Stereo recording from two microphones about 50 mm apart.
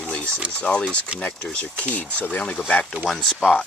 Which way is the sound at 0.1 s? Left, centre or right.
Left.